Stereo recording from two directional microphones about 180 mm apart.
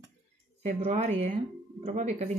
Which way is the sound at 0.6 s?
35° right (ahead or behind).